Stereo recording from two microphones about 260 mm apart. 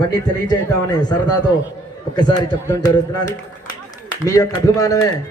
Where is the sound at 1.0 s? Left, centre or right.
Centre.